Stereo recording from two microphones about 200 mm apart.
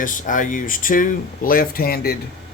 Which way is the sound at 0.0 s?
40° left (ahead or behind).